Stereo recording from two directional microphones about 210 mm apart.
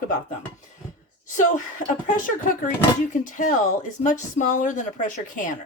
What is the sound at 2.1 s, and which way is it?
Speech, 40° left (ahead or behind).